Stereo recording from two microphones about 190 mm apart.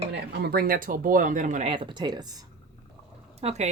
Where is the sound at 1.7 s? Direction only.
25° right (ahead or behind).